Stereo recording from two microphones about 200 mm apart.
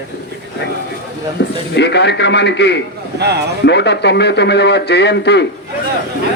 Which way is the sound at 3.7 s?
60° left (ahead or behind).